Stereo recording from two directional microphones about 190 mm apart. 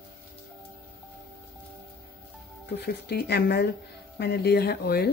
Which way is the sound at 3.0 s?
60° left (ahead or behind).